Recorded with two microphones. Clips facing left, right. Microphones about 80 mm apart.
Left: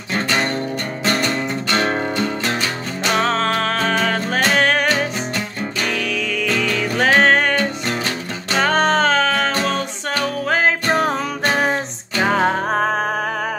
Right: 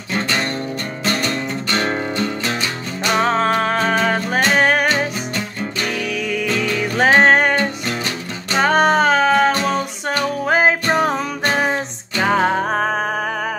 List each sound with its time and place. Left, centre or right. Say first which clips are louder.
1.0 s music: left 1 dB; left
1.9 s music: left 1 dB; centre
3.1 s music: right 2 dB; centre
10.9 s music: right 1 dB; centre